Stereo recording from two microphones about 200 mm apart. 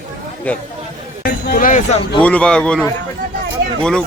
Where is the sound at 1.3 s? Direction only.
50° left (ahead or behind).